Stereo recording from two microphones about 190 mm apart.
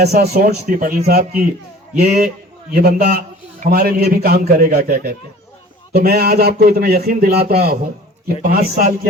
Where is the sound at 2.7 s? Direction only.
50° right (ahead or behind).